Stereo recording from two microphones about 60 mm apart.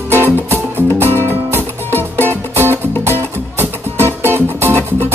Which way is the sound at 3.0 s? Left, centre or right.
Right.